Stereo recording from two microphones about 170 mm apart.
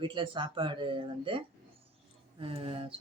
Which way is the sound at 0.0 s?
30° right (ahead or behind).